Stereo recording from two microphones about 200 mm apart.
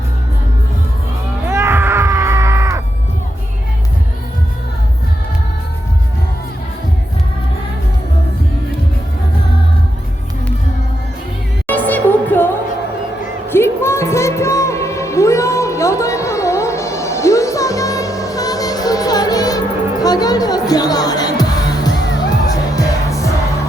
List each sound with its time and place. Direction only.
1.5 s music: 10° right (ahead or behind)
11.7 s music: 10° left (ahead or behind)
13.5 s music: 10° left (ahead or behind)